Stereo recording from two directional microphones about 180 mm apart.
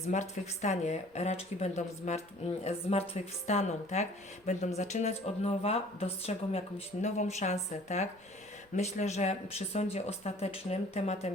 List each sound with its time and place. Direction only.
0.1 s speech: 40° left (ahead or behind)